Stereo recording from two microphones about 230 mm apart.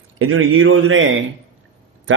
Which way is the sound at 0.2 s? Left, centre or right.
Right.